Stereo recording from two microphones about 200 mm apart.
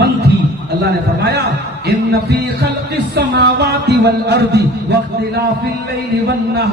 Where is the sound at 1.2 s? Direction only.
55° right (ahead or behind).